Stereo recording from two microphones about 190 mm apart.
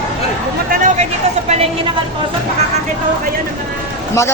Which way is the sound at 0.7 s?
40° right (ahead or behind).